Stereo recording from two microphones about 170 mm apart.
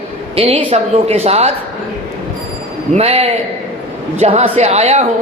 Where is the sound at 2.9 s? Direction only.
35° right (ahead or behind).